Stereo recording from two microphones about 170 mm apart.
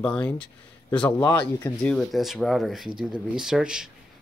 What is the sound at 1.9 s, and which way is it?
Speech, centre (ahead or behind).